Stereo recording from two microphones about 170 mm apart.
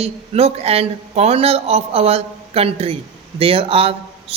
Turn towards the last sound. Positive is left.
turn(degrees=-35)  # may be behind; listen again after turning